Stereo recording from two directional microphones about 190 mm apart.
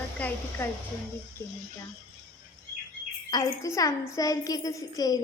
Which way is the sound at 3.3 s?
15° left (ahead or behind).